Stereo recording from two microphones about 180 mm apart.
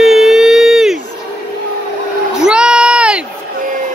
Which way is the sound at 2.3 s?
5° right (ahead or behind).